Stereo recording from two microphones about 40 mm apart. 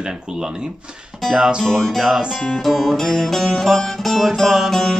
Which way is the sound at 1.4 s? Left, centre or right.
Centre.